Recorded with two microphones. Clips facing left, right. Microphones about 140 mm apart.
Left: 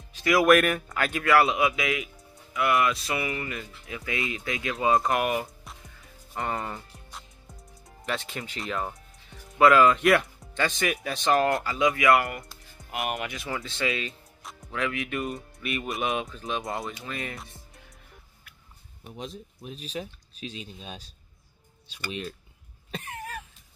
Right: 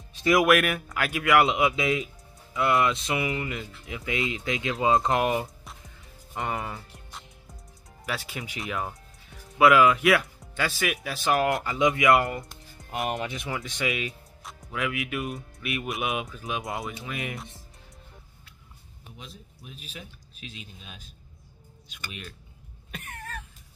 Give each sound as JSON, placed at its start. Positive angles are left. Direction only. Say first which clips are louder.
{"t": 0.2, "sound": "speech", "louder": "right 1 dB", "side_deg": -25}
{"t": 0.5, "sound": "speech", "louder": "left 2 dB", "side_deg": -5}
{"t": 1.3, "sound": "speech", "louder": "right 1 dB", "side_deg": -20}
{"t": 6.5, "sound": "music", "louder": "even", "side_deg": 0}
{"t": 8.0, "sound": "speech", "louder": "left 1 dB", "side_deg": -5}
{"t": 11.6, "sound": "speech", "louder": "right 1 dB", "side_deg": -20}
{"t": 14.0, "sound": "speech", "louder": "right 2 dB", "side_deg": 0}
{"t": 17.0, "sound": "speech", "louder": "right 1 dB", "side_deg": -10}
{"t": 19.1, "sound": "speech", "louder": "left 9 dB", "side_deg": 40}
{"t": 22.8, "sound": "cough", "louder": "left 4 dB", "side_deg": 25}